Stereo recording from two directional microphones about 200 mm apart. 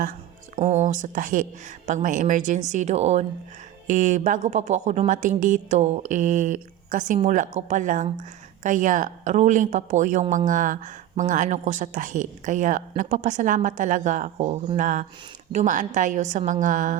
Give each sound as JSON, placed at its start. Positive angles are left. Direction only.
{"t": 0.6, "sound": "speech", "side_deg": -35}